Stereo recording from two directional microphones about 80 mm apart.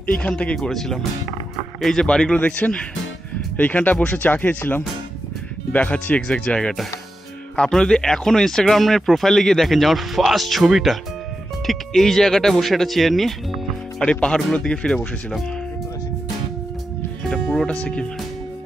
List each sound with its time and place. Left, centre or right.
0.1 s speech: centre
0.6 s speech: centre
17.2 s speech: centre